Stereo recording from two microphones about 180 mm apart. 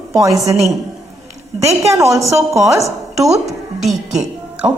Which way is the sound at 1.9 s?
15° right (ahead or behind).